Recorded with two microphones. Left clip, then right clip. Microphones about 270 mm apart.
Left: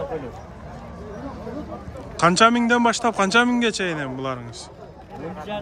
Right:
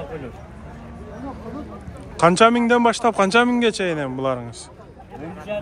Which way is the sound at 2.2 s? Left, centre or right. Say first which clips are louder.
Right 2 dB; centre.